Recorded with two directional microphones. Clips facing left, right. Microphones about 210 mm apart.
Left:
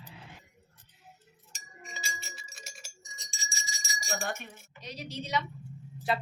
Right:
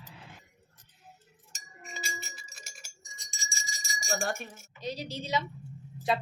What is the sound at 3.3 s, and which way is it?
Bell, 45° right (ahead or behind).